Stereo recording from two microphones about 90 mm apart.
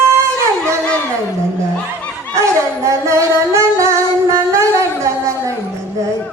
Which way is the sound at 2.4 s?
35° right (ahead or behind).